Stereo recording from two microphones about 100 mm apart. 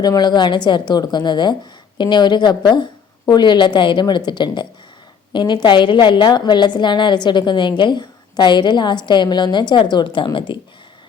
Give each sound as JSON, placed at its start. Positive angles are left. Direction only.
{"t": 0.0, "sound": "a woman's voice", "side_deg": 45}